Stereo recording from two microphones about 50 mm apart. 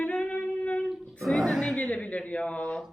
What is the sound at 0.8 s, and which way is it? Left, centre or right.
Singing, centre.